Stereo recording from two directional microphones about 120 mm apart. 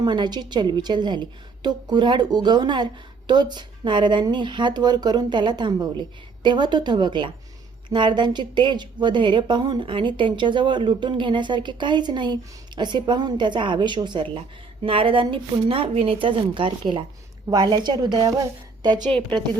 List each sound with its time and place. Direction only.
0.0 s a woman's voice: 35° right (ahead or behind)